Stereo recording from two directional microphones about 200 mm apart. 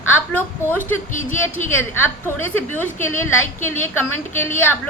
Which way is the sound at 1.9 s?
10° left (ahead or behind).